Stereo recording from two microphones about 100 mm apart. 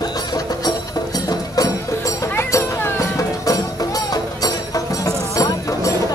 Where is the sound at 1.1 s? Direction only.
40° left (ahead or behind).